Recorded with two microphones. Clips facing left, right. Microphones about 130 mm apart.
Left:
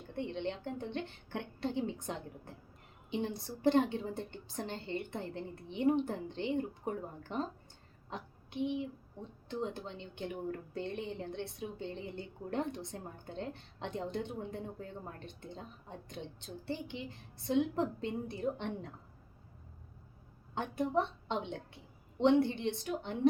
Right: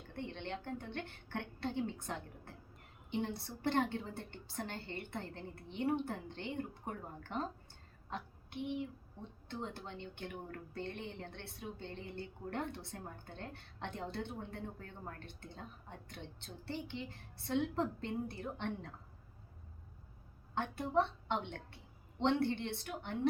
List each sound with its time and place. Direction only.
0.2 s a woman's voice: 15° left (ahead or behind)
20.6 s a woman's voice: 15° left (ahead or behind)